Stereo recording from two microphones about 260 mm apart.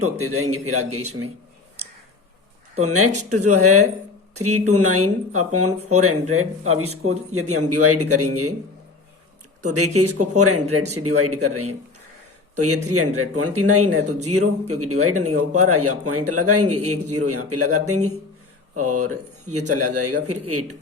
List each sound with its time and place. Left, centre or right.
0.0 s a man's voice: right
2.8 s a man's voice: right
3.1 s speech: right
3.3 s a man's voice: right
9.6 s a man's voice: right